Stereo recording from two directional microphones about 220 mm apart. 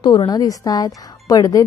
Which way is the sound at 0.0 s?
20° left (ahead or behind).